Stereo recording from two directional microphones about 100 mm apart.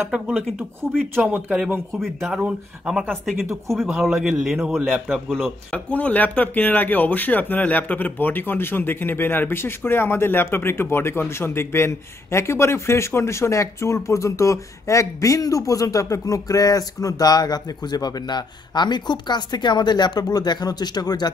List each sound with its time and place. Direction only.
1.2 s speech: 10° right (ahead or behind)
2.0 s a man's voice: centre (ahead or behind)
3.1 s a man's voice: 5° left (ahead or behind)
5.7 s speech: 15° left (ahead or behind); by 21.3 s 40° left (ahead or behind)